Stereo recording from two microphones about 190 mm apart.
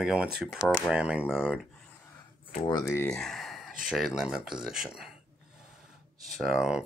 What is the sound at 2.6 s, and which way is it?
Speech, 20° left (ahead or behind).